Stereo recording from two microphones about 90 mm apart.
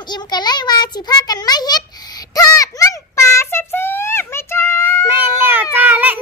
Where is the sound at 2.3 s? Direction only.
45° left (ahead or behind).